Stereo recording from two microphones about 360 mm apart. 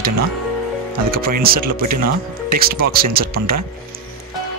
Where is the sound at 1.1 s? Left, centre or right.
Right.